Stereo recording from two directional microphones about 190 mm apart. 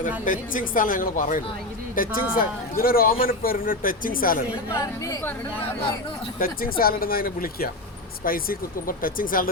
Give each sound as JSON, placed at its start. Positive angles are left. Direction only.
{"t": 0.3, "sound": "a man's voice", "side_deg": 45}
{"t": 4.7, "sound": "speech", "side_deg": 15}
{"t": 6.4, "sound": "a man's voice", "side_deg": 50}